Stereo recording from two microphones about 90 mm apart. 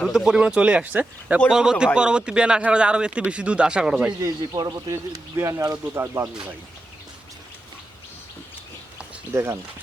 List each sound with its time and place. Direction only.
0.1 s speech: 5° right (ahead or behind)
4.4 s speech: 50° right (ahead or behind)
4.9 s speech: 35° right (ahead or behind)
9.3 s speech: 30° right (ahead or behind)